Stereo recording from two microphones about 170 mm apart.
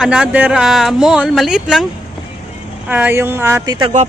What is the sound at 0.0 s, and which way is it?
Speech, 5° right (ahead or behind).